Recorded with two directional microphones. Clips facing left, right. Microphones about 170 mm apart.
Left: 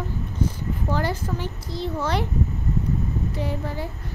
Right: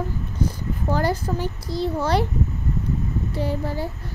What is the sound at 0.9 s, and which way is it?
A child's voice, 40° right (ahead or behind).